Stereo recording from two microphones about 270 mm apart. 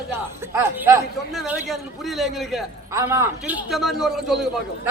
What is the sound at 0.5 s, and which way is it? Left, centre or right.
A man's voice, centre.